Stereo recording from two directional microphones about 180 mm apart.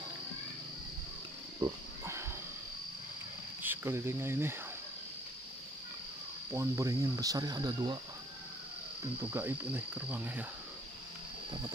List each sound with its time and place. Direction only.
1.6 s cricket: 15° right (ahead or behind)
3.6 s cricket: 15° right (ahead or behind)
6.5 s speech: 15° right (ahead or behind)
9.2 s cricket: 10° right (ahead or behind)